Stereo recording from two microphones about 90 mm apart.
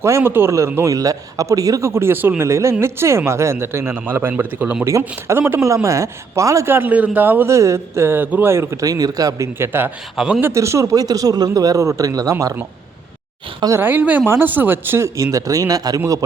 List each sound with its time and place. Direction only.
0.0 s speech: 30° right (ahead or behind)
4.9 s speech: 30° right (ahead or behind)
6.7 s speech: 20° right (ahead or behind)
7.5 s speech: 30° right (ahead or behind)
9.6 s speech: 25° right (ahead or behind)
10.2 s speech: 5° right (ahead or behind)
10.4 s speech: 30° right (ahead or behind)
13.7 s speech: 25° right (ahead or behind); by 16.0 s 45° right (ahead or behind)